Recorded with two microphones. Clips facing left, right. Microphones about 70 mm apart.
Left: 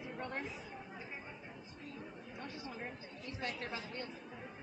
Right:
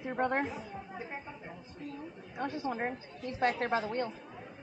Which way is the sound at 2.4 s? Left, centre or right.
Right.